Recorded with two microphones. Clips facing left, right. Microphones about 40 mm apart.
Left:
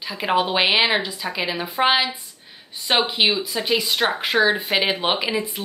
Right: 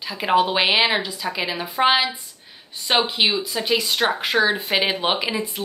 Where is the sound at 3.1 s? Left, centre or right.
Centre.